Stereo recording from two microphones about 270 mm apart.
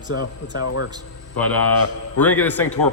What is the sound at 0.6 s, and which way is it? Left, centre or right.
Speech, left.